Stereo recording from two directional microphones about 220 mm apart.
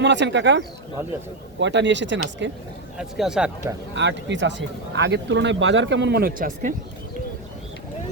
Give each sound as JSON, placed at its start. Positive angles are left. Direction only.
{"t": 0.0, "sound": "speech", "side_deg": -55}
{"t": 3.0, "sound": "speech", "side_deg": -5}
{"t": 3.9, "sound": "speech", "side_deg": -55}